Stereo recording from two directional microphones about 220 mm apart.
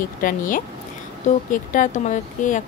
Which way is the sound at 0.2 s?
40° left (ahead or behind).